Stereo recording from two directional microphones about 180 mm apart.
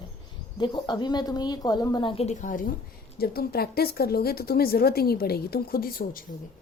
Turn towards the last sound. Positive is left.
turn(degrees=50)  # may be behind; listen again after turning